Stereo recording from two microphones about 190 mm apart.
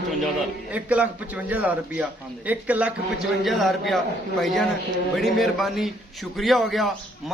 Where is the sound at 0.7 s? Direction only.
5° right (ahead or behind).